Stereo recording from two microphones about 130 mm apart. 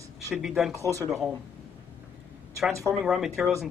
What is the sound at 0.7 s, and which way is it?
Speech, 25° right (ahead or behind).